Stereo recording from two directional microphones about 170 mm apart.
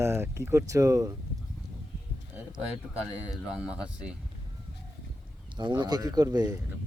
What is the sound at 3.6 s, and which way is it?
Speech, 5° right (ahead or behind).